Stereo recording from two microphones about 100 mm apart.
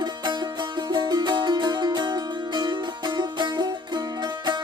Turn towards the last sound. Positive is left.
turn(degrees=-50)  # may be behind; listen again after turning